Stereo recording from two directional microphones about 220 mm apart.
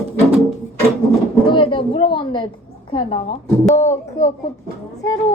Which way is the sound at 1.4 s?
20° left (ahead or behind).